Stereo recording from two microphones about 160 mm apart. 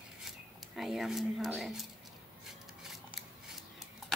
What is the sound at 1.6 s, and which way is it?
Speech, centre (ahead or behind).